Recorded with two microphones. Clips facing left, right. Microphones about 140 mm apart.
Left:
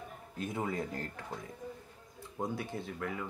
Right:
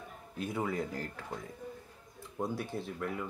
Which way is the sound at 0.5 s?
20° left (ahead or behind).